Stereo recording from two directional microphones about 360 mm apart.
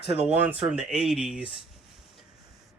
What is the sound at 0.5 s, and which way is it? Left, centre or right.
Speech, centre.